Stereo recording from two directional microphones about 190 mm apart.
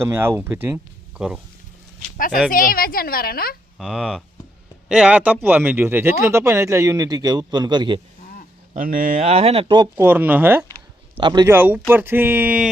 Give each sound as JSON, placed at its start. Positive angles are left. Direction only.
{"t": 0.0, "sound": "speech", "side_deg": -10}
{"t": 2.1, "sound": "a woman's voice", "side_deg": 45}
{"t": 3.8, "sound": "speech", "side_deg": 0}
{"t": 8.7, "sound": "speech", "side_deg": -45}
{"t": 10.0, "sound": "speech", "side_deg": -10}
{"t": 11.2, "sound": "speech", "side_deg": -25}
{"t": 11.4, "sound": "speech", "side_deg": -10}